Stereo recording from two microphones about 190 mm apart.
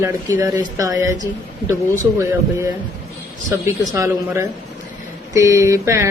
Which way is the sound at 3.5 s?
15° right (ahead or behind).